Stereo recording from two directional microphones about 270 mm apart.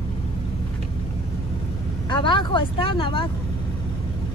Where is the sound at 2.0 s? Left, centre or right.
Centre.